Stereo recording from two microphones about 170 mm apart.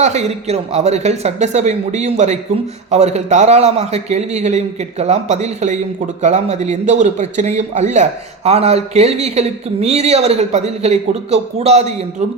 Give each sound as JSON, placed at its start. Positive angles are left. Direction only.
{"t": 0.0, "sound": "a man's voice", "side_deg": -40}